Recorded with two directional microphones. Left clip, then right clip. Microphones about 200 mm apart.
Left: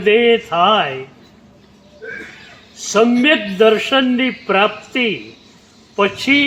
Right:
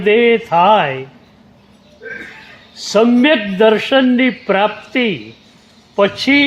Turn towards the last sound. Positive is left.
turn(degrees=-25)  # may be behind; listen again after turning